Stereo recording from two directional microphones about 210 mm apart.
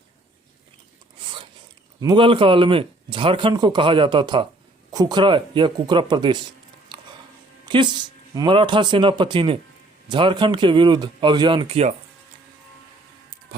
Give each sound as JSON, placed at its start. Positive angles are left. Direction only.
{"t": 1.2, "sound": "filing", "side_deg": -25}
{"t": 2.0, "sound": "speech", "side_deg": -20}
{"t": 7.6, "sound": "a sound", "side_deg": -20}
{"t": 8.4, "sound": "speech", "side_deg": -20}